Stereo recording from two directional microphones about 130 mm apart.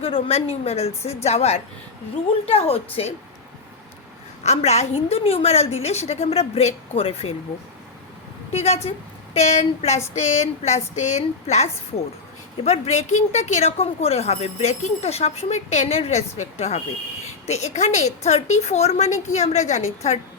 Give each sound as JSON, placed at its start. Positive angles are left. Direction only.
{"t": 0.0, "sound": "a woman's voice", "side_deg": 50}
{"t": 4.4, "sound": "a woman's voice", "side_deg": 55}
{"t": 8.5, "sound": "a woman's voice", "side_deg": 55}